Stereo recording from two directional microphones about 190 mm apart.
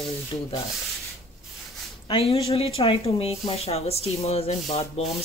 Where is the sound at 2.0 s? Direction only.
30° left (ahead or behind).